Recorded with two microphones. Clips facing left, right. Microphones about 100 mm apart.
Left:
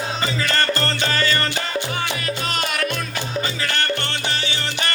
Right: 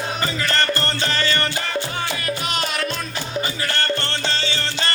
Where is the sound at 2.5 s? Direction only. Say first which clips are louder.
Left 1 dB; 55° left (ahead or behind).